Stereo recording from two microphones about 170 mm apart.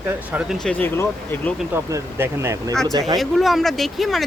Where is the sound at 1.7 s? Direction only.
15° right (ahead or behind).